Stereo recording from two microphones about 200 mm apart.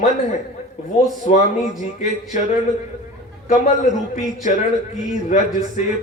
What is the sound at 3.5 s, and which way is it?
A man's voice, 35° left (ahead or behind).